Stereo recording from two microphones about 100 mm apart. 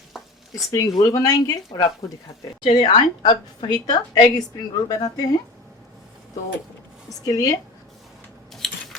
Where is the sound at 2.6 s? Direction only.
55° left (ahead or behind).